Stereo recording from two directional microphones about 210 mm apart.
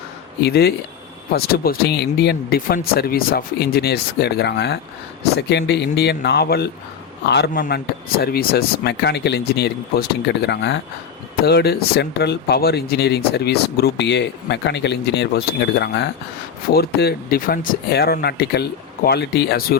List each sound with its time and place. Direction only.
0.4 s speech: 50° left (ahead or behind)